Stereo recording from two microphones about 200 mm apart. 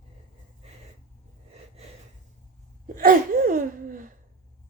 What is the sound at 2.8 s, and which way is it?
Gasp, 45° right (ahead or behind).